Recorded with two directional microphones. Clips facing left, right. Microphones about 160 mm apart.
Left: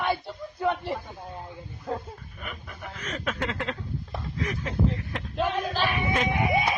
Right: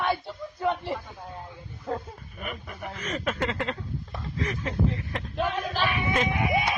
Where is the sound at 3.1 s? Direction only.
Centre (ahead or behind).